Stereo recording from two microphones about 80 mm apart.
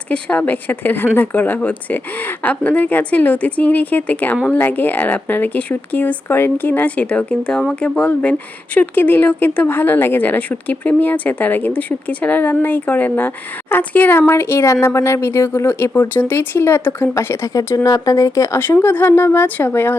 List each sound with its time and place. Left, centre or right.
0.1 s speech: centre
17.2 s speech: left
18.9 s speech: left